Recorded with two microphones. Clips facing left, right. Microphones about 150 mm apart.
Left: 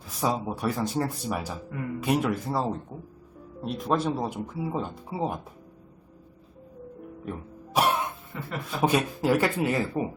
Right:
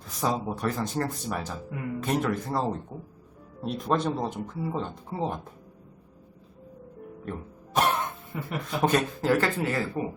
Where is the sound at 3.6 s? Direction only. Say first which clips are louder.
Even; centre (ahead or behind).